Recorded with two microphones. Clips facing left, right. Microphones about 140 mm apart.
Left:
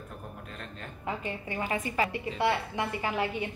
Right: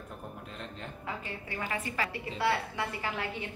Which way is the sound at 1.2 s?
20° left (ahead or behind).